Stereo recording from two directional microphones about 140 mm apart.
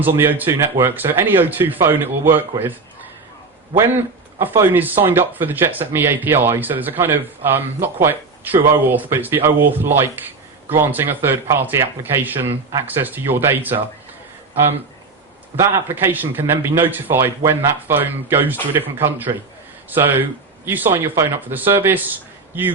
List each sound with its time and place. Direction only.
0.0 s speech: 15° right (ahead or behind)
4.4 s speech: 15° right (ahead or behind)
15.7 s speech: 15° right (ahead or behind)